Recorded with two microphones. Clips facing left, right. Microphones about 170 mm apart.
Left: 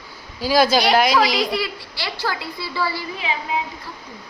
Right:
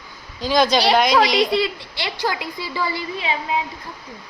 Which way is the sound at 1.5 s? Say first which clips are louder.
Right 4 dB; 20° right (ahead or behind).